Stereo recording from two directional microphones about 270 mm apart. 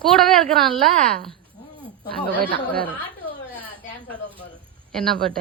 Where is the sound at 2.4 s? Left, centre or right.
Right.